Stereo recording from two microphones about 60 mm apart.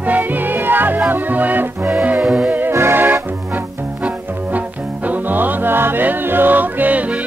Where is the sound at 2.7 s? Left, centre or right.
Right.